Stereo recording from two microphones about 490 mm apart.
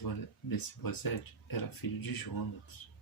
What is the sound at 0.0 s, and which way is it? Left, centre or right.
Speech, left.